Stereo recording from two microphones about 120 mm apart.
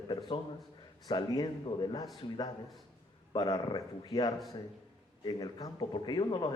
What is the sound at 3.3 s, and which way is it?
A man's voice, 35° left (ahead or behind).